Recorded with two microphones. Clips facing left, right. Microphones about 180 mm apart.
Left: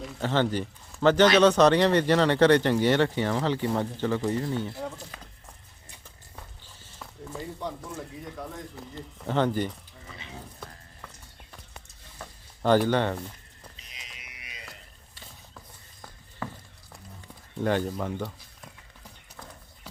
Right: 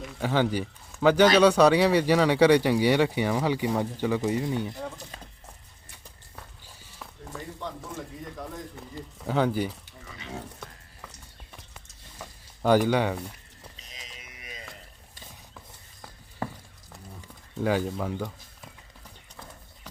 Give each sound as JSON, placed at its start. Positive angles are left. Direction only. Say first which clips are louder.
{"t": 0.0, "sound": "speech", "louder": "even", "side_deg": -10}
{"t": 7.8, "sound": "speech", "louder": "even", "side_deg": 0}
{"t": 12.2, "sound": "a sound", "louder": "right 1 dB", "side_deg": -10}
{"t": 12.9, "sound": "speech", "louder": "even", "side_deg": -10}
{"t": 14.3, "sound": "a sound", "louder": "right 4 dB", "side_deg": -45}
{"t": 17.6, "sound": "speech", "louder": "even", "side_deg": -5}